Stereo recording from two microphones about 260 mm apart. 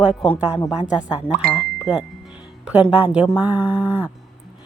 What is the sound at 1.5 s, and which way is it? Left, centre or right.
Speech, centre.